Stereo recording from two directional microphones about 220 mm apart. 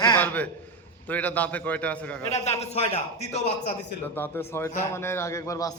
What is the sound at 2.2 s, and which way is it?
Speech, 30° left (ahead or behind).